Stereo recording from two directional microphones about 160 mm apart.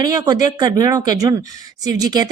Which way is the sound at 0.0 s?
25° right (ahead or behind).